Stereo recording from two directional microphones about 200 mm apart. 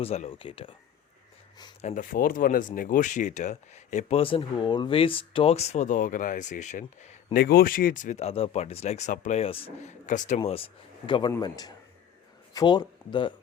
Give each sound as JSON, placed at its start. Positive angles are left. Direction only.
{"t": 0.0, "sound": "a man's voice", "side_deg": 30}
{"t": 1.8, "sound": "speech", "side_deg": 40}
{"t": 7.4, "sound": "speech", "side_deg": 45}
{"t": 10.1, "sound": "a man's voice", "side_deg": 40}